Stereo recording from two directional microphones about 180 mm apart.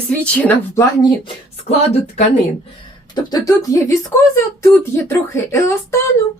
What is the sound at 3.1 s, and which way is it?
Speech, 20° left (ahead or behind).